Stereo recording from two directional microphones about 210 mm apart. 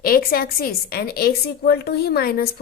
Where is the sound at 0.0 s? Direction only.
45° left (ahead or behind).